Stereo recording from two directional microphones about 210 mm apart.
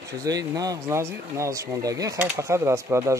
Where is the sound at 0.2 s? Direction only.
15° right (ahead or behind).